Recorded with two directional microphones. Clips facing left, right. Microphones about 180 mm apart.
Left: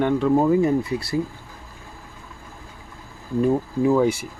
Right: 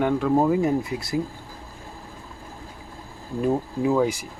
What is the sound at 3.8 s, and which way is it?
Speech, centre (ahead or behind).